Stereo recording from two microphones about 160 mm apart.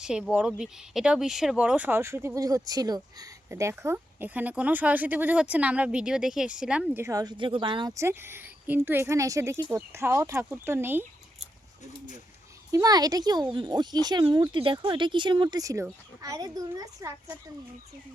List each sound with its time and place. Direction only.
0.0 s speech: 5° right (ahead or behind); by 7.9 s 30° right (ahead or behind)
7.9 s speech: 15° right (ahead or behind)
12.7 s speech: 25° right (ahead or behind)